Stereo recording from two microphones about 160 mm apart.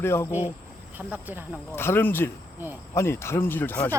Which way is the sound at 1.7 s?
15° left (ahead or behind).